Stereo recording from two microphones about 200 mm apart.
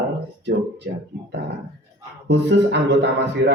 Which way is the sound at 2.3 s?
60° right (ahead or behind).